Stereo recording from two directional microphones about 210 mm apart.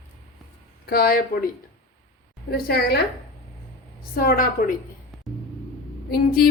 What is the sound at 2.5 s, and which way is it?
Speech, 50° left (ahead or behind).